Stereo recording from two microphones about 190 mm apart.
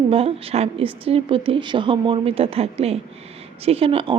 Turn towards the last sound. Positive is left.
turn(degrees=-30)  # may be behind; listen again after turning